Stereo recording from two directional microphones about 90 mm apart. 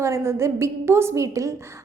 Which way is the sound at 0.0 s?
35° right (ahead or behind).